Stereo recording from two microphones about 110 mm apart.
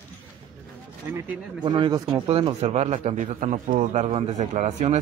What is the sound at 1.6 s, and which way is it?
Speech, 50° right (ahead or behind).